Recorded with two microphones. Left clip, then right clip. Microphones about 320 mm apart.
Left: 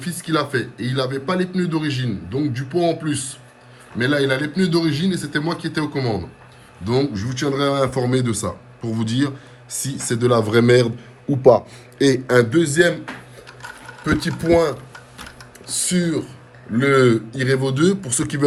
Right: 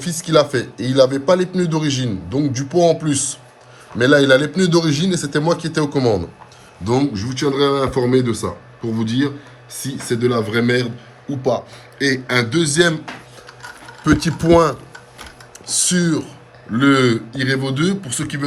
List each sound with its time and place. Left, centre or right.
0.0 s a man's voice: centre
12.0 s speech: centre
12.5 s a man's voice: centre
14.0 s a man's voice: centre
16.0 s a man's voice: centre